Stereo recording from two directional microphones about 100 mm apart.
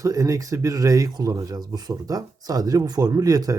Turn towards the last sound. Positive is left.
turn(degrees=-40)  # may be behind; listen again after turning